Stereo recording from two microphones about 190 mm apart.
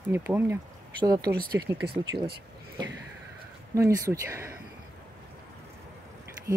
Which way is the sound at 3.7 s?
15° right (ahead or behind).